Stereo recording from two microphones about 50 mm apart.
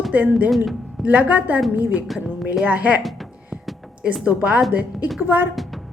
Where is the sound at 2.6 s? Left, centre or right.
Right.